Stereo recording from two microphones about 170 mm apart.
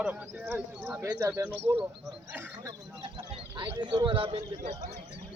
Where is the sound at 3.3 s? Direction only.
30° right (ahead or behind).